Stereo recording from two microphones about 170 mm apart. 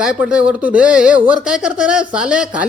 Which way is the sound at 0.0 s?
5° right (ahead or behind).